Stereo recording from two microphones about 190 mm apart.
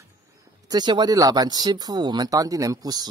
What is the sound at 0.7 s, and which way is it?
Speech, 20° right (ahead or behind).